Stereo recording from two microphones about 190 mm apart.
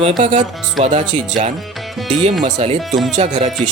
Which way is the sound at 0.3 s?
40° right (ahead or behind).